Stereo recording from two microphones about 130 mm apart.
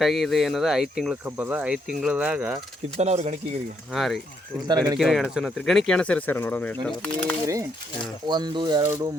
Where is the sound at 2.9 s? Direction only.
60° right (ahead or behind).